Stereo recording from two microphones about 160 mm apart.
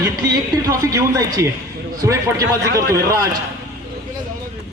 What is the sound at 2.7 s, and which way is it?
Speech, 70° right (ahead or behind).